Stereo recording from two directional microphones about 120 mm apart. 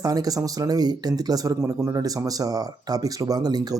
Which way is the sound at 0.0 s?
30° right (ahead or behind).